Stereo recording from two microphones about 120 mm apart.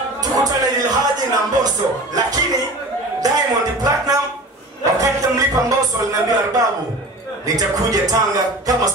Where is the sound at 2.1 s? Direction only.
30° right (ahead or behind).